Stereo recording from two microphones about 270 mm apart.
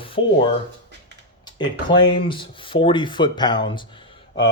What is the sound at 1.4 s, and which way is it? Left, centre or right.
Speech, centre.